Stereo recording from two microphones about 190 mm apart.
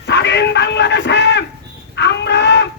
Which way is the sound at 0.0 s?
65° left (ahead or behind).